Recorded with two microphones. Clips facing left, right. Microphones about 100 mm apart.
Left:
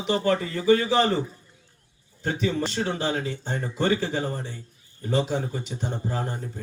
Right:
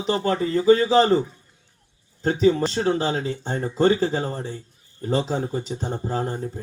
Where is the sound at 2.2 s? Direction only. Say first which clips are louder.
Right 7 dB; 30° right (ahead or behind).